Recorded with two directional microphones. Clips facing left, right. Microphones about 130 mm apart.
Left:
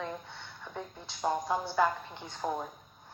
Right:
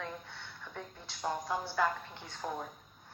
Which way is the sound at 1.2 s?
25° left (ahead or behind).